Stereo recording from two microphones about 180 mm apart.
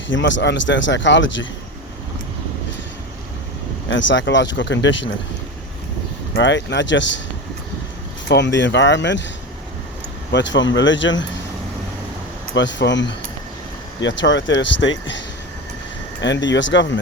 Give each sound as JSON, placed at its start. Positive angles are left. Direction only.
{"t": 0.1, "sound": "speech", "side_deg": 90}
{"t": 3.8, "sound": "speech", "side_deg": 90}
{"t": 6.3, "sound": "speech", "side_deg": 85}
{"t": 8.3, "sound": "speech", "side_deg": 80}
{"t": 10.3, "sound": "speech", "side_deg": 90}
{"t": 12.5, "sound": "speech", "side_deg": 85}
{"t": 16.2, "sound": "speech", "side_deg": 85}